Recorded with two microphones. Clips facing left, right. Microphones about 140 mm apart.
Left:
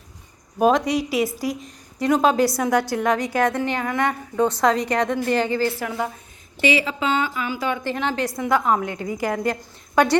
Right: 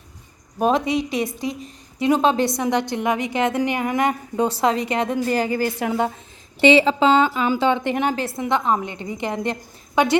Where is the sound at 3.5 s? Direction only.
15° right (ahead or behind).